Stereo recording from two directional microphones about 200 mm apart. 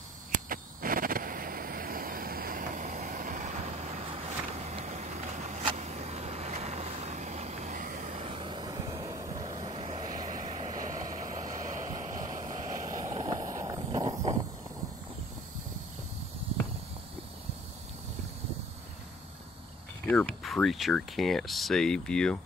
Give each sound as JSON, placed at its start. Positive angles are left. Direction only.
{"t": 0.3, "sound": "a sound", "side_deg": -45}
{"t": 13.3, "sound": "run", "side_deg": -15}
{"t": 20.1, "sound": "speech", "side_deg": 5}